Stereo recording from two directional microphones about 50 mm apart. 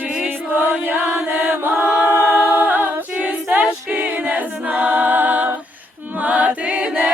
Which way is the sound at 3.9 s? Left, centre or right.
Right.